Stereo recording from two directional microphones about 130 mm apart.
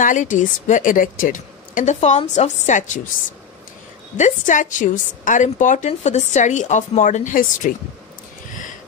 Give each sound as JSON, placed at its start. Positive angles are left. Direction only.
{"t": 0.0, "sound": "a woman's voice", "side_deg": 80}
{"t": 4.2, "sound": "a woman's voice", "side_deg": 80}
{"t": 5.9, "sound": "a woman's voice", "side_deg": 60}